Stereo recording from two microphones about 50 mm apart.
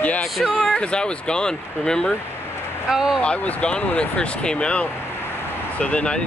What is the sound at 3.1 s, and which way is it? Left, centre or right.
Speech, left.